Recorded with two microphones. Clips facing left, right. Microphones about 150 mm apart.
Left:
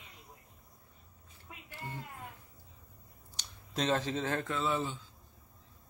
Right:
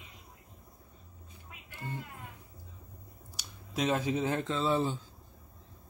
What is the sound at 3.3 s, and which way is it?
Speech, 10° right (ahead or behind).